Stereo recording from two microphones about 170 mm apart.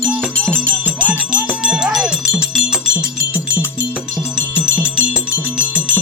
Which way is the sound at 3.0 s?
15° left (ahead or behind).